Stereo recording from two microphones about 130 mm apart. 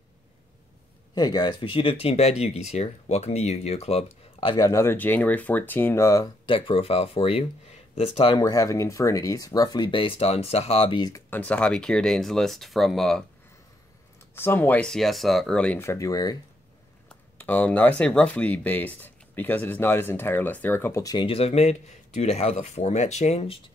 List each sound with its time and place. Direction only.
1.1 s speech: 30° left (ahead or behind); by 4.5 s 55° left (ahead or behind)
4.5 s speech: 30° left (ahead or behind)
6.4 s speech: 40° left (ahead or behind)
8.4 s speech: 25° left (ahead or behind); by 11.1 s 45° left (ahead or behind)
11.2 s speech: 10° left (ahead or behind)
14.3 s speech: 15° left (ahead or behind)
15.8 s speech: 20° left (ahead or behind)
17.1 s speech: 15° left (ahead or behind)
21.0 s speech: 30° left (ahead or behind)
21.3 s speech: 50° left (ahead or behind)